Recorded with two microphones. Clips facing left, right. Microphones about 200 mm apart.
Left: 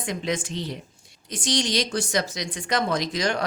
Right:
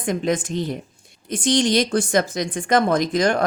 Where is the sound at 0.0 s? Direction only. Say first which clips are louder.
Right 6 dB; 50° right (ahead or behind).